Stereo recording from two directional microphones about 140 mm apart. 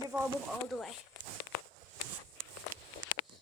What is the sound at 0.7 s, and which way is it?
Speech, centre (ahead or behind).